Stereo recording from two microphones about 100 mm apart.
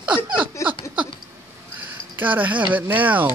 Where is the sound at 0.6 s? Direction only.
30° left (ahead or behind).